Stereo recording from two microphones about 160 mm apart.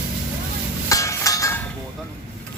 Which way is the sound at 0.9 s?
20° left (ahead or behind).